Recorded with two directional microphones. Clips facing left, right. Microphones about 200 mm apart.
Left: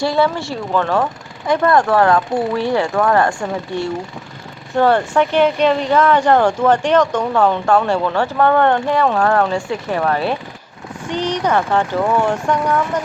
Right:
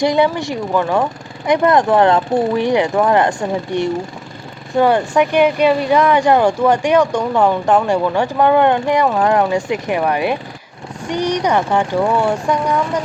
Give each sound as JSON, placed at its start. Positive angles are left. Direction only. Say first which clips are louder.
{"t": 0.0, "sound": "speech", "louder": "right 2 dB", "side_deg": -15}